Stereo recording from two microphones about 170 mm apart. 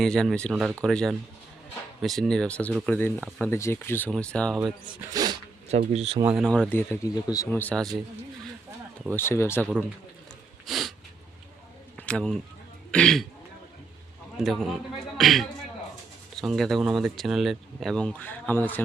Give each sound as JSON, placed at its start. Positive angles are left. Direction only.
{"t": 0.0, "sound": "speech", "side_deg": 5}
{"t": 4.6, "sound": "speech", "side_deg": -20}
{"t": 5.9, "sound": "speech", "side_deg": -40}
{"t": 6.2, "sound": "speech", "side_deg": -5}
{"t": 6.5, "sound": "speech", "side_deg": 10}
{"t": 9.1, "sound": "speech", "side_deg": 15}
{"t": 10.7, "sound": "a sound", "side_deg": 0}
{"t": 11.9, "sound": "speech", "side_deg": 5}
{"t": 14.3, "sound": "speech", "side_deg": 0}